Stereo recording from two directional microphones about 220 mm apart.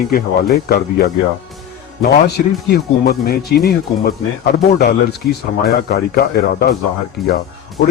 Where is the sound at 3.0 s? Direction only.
45° left (ahead or behind).